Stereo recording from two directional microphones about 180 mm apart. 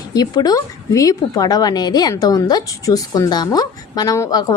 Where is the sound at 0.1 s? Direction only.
20° left (ahead or behind).